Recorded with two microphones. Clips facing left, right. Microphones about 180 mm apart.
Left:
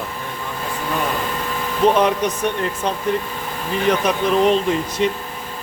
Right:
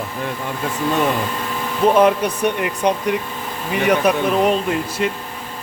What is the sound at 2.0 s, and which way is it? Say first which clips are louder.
Speech: right 3 dB; 10° right (ahead or behind).